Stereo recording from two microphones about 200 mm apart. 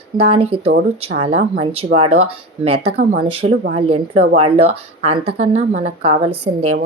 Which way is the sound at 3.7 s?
30° right (ahead or behind).